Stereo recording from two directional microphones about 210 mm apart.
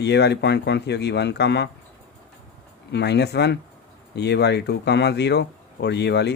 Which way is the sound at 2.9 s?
55° left (ahead or behind).